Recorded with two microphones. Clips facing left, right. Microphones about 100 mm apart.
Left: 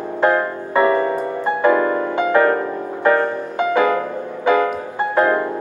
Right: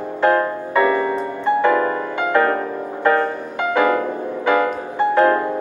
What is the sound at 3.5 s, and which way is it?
Music, 20° left (ahead or behind).